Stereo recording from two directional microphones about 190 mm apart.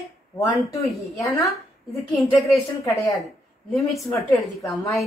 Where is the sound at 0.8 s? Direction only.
Centre (ahead or behind).